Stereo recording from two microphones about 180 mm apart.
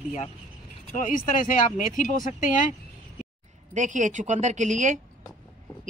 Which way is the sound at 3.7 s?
45° right (ahead or behind).